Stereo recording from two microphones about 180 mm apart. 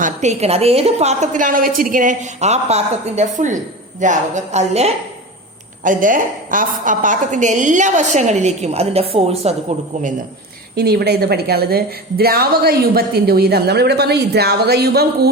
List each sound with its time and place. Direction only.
0.0 s a woman's voice: 40° right (ahead or behind)
5.8 s a woman's voice: 45° right (ahead or behind)
10.8 s a woman's voice: 60° right (ahead or behind)